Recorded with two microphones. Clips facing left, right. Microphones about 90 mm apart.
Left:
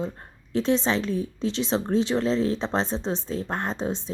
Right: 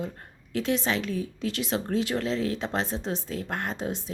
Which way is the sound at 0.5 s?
30° left (ahead or behind).